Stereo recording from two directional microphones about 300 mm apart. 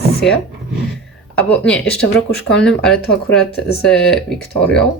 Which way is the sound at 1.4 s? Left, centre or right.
Centre.